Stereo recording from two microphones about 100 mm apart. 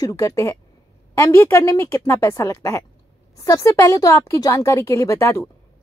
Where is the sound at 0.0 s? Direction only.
30° left (ahead or behind).